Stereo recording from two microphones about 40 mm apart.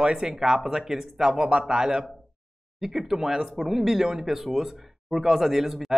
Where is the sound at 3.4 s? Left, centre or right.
Centre.